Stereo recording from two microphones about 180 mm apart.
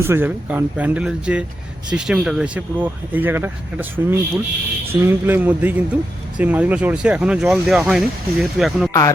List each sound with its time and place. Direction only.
0.0 s speech: 10° right (ahead or behind)
8.9 s speech: 20° left (ahead or behind)